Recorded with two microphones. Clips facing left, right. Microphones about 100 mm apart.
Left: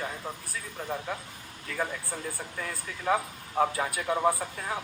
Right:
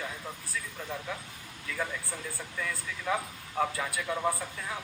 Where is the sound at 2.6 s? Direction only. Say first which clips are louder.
Even; 35° left (ahead or behind).